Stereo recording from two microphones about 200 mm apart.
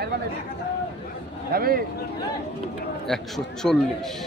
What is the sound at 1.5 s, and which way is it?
Speech, 50° right (ahead or behind).